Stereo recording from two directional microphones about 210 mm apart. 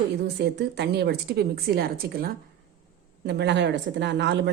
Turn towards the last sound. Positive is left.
turn(degrees=-55)  # may be behind; listen again after turning